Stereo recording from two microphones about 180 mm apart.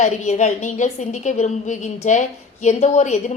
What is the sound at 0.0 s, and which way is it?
A woman's voice, 40° left (ahead or behind).